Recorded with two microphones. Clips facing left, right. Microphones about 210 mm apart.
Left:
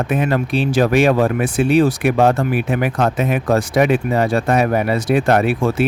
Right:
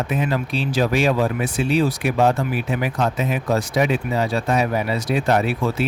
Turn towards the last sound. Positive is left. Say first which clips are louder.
# left 4 dB
turn(degrees=50)  # may be behind; listen again after turning